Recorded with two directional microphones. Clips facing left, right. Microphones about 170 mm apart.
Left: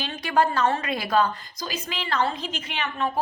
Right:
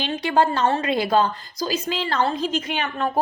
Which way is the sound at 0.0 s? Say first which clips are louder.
Right 3 dB; 25° right (ahead or behind).